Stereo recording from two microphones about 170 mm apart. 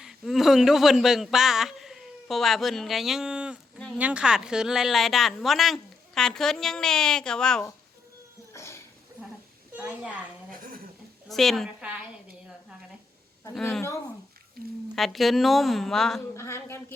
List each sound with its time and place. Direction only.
0.0 s a man's voice: centre (ahead or behind)
8.5 s a sound: 15° left (ahead or behind)
9.7 s a woman's voice: 10° right (ahead or behind)
11.3 s a woman's voice: centre (ahead or behind)
13.5 s a woman's voice: centre (ahead or behind)
14.9 s a woman's voice: centre (ahead or behind)
16.3 s speech: 15° left (ahead or behind)